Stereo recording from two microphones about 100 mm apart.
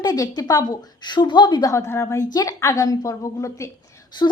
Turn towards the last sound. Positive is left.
turn(degrees=45)  # may be behind; listen again after turning